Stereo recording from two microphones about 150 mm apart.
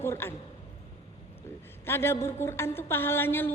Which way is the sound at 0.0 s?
15° left (ahead or behind).